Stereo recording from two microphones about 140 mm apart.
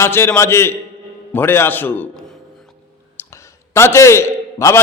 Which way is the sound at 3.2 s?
20° left (ahead or behind).